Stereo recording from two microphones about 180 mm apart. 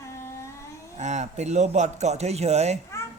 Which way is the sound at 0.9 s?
40° right (ahead or behind).